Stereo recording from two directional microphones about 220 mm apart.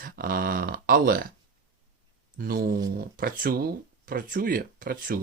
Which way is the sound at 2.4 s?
40° right (ahead or behind).